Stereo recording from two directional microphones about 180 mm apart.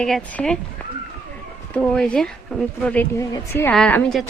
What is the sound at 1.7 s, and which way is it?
A woman's voice, 5° left (ahead or behind).